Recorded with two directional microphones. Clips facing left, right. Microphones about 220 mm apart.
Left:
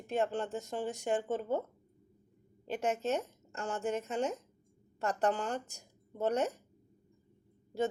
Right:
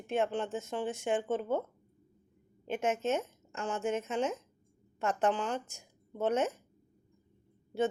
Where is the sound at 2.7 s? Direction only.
35° left (ahead or behind).